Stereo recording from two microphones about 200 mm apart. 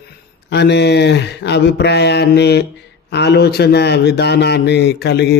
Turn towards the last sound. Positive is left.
turn(degrees=55)  # may be behind; listen again after turning